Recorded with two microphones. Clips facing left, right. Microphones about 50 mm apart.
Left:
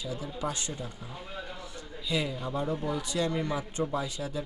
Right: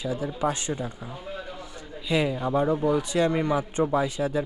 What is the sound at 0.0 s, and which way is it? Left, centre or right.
Speech, right.